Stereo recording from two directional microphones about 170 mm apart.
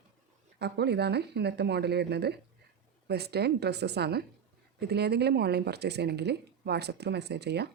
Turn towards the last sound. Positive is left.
turn(degrees=-75)  # may be behind; listen again after turning